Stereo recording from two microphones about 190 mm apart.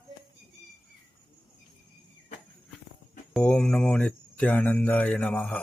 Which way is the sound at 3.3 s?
5° left (ahead or behind).